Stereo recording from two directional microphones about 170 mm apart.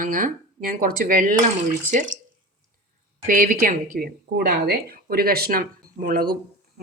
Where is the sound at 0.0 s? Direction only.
55° right (ahead or behind).